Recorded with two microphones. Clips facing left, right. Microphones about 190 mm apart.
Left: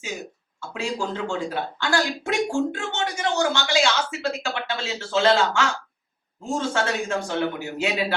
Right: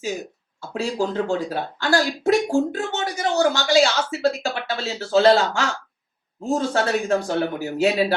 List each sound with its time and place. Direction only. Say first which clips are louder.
0.6 s a woman's voice: right 4 dB; 35° right (ahead or behind)